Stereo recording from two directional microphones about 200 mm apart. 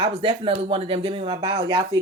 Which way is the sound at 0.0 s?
25° right (ahead or behind).